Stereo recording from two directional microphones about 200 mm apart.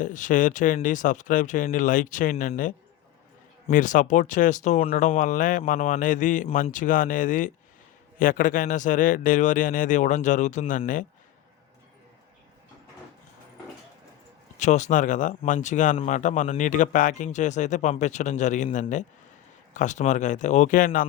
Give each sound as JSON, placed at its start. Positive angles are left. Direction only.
{"t": 0.0, "sound": "speech", "side_deg": 40}
{"t": 14.6, "sound": "speech", "side_deg": 35}